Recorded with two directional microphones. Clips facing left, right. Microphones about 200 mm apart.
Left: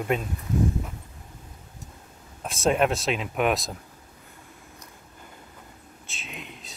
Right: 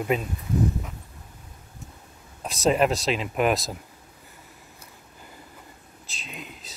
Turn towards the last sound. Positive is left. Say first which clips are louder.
# even
turn(degrees=0)  # may be behind; listen again after turning